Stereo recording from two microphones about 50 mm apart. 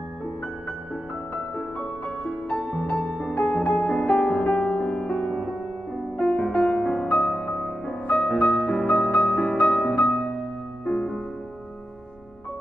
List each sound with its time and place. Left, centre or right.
1.6 s music: centre